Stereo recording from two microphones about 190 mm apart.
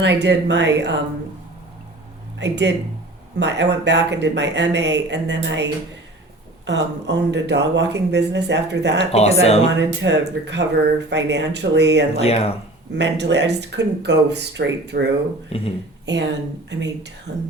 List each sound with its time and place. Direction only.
0.0 s speech: 65° right (ahead or behind)
2.4 s speech: 65° right (ahead or behind)
6.7 s speech: 65° right (ahead or behind)
9.1 s speech: 35° left (ahead or behind)
9.7 s speech: 65° right (ahead or behind)
12.2 s speech: 35° left (ahead or behind)
12.9 s speech: 65° right (ahead or behind)
15.5 s speech: 30° left (ahead or behind)
16.1 s speech: 65° right (ahead or behind)